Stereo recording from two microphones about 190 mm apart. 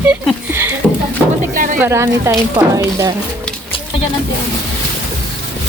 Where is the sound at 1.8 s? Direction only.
15° right (ahead or behind).